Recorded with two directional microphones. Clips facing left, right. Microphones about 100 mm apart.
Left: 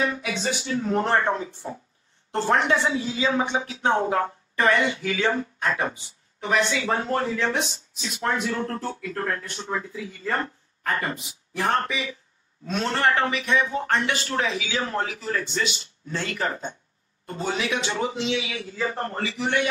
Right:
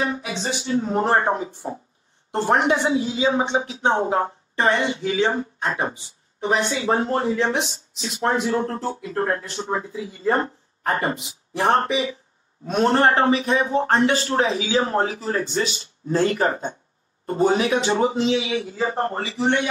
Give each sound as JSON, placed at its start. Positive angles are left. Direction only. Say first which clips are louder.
{"t": 0.1, "sound": "speech", "louder": "right 1 dB", "side_deg": -25}
{"t": 1.3, "sound": "a man's voice", "louder": "right 3 dB", "side_deg": -20}